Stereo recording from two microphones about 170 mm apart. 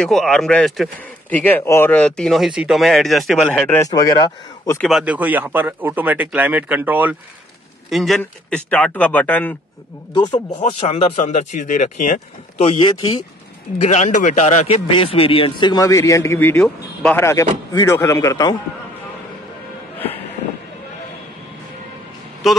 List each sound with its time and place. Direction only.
0.0 s a man's voice: 5° left (ahead or behind)
3.8 s speech: 20° left (ahead or behind)
4.7 s speech: centre (ahead or behind)
7.9 s a man's voice: centre (ahead or behind)
10.1 s speech: 25° left (ahead or behind)
10.8 s a man's voice: 40° left (ahead or behind)
13.7 s a man's voice: 45° left (ahead or behind); by 18.6 s 20° left (ahead or behind)
22.4 s speech: centre (ahead or behind)